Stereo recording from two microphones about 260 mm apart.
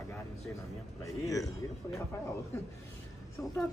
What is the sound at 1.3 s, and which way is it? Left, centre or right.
Speech, centre.